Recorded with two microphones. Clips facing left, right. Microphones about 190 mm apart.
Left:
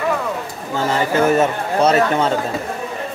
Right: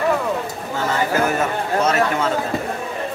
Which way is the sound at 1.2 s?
30° left (ahead or behind).